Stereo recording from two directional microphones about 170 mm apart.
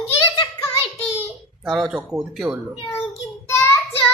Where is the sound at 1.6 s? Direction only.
5° right (ahead or behind).